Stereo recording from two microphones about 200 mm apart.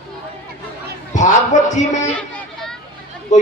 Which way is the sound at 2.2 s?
5° left (ahead or behind).